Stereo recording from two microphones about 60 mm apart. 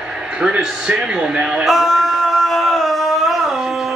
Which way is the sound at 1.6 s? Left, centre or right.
Centre.